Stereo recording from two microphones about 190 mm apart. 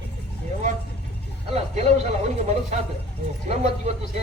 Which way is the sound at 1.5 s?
35° right (ahead or behind).